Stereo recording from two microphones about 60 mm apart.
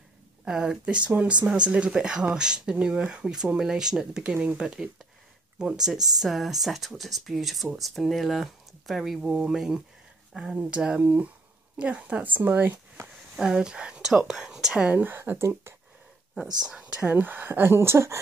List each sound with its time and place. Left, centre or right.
0.5 s speech: centre
11.0 s speech: right
13.4 s speech: centre
15.0 s speech: right
16.3 s speech: centre
16.8 s speech: right